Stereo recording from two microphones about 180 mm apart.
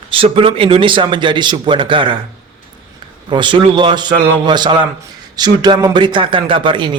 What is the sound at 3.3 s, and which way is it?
A man's voice, 25° right (ahead or behind).